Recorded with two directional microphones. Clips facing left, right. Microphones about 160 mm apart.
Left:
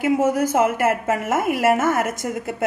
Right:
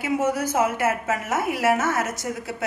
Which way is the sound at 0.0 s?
45° left (ahead or behind).